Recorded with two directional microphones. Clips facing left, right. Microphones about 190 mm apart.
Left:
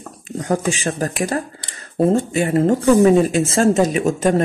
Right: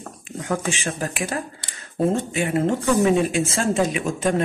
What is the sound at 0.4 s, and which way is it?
A woman's voice, 35° left (ahead or behind).